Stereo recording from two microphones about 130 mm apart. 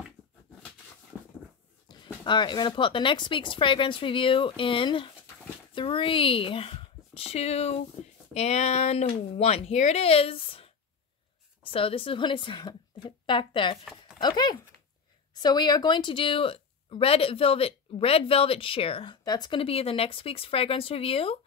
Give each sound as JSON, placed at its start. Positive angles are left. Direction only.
{"t": 1.9, "sound": "a sound", "side_deg": 35}
{"t": 2.2, "sound": "speech", "side_deg": 35}
{"t": 19.2, "sound": "speech", "side_deg": 30}